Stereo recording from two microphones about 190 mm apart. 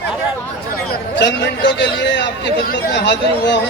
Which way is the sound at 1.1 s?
70° left (ahead or behind).